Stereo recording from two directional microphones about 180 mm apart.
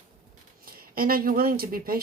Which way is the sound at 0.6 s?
55° right (ahead or behind).